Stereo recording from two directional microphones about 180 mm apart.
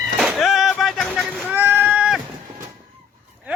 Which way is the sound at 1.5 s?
10° right (ahead or behind).